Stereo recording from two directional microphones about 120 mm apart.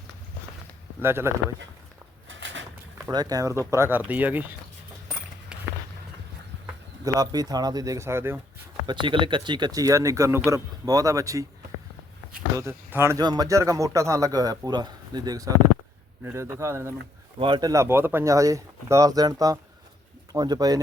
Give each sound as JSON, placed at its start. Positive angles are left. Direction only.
{"t": 1.0, "sound": "speech", "side_deg": -20}
{"t": 3.1, "sound": "speech", "side_deg": -35}
{"t": 7.0, "sound": "speech", "side_deg": -30}
{"t": 8.9, "sound": "speech", "side_deg": -45}
{"t": 12.5, "sound": "speech", "side_deg": -20}
{"t": 13.1, "sound": "speech", "side_deg": -35}
{"t": 17.3, "sound": "speech", "side_deg": -40}